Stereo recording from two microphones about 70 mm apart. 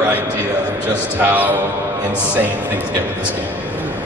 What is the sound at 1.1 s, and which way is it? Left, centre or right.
Speech, right.